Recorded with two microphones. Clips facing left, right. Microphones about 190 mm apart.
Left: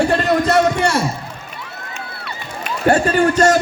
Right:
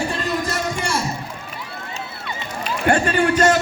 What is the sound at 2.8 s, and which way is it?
Speech, 40° left (ahead or behind).